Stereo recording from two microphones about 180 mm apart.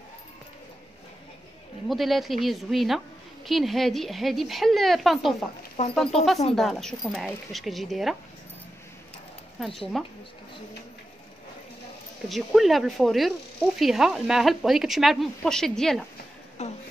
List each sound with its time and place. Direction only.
1.9 s speech: centre (ahead or behind)
9.6 s speech: centre (ahead or behind)
12.3 s speech: centre (ahead or behind)
16.6 s a sound: 40° left (ahead or behind)